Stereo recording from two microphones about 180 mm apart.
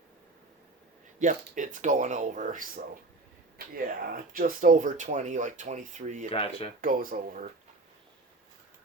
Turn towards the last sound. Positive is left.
turn(degrees=-50)  # may be behind; listen again after turning